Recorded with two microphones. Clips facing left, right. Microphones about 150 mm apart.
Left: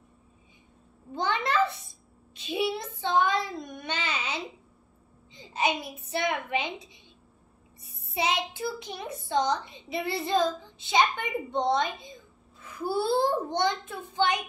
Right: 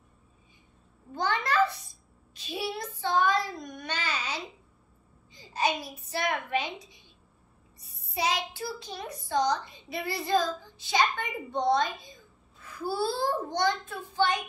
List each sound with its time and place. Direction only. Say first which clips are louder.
1.1 s a child's voice: even; 20° left (ahead or behind)